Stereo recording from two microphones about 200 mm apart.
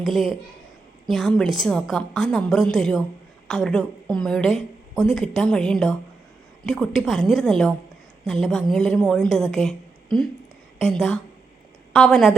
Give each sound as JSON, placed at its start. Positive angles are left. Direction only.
{"t": 0.0, "sound": "a woman's voice", "side_deg": 0}